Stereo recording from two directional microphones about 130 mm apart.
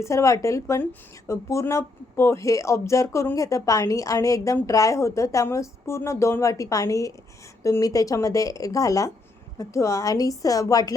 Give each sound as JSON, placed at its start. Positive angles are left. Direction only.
{"t": 0.0, "sound": "speech", "side_deg": 25}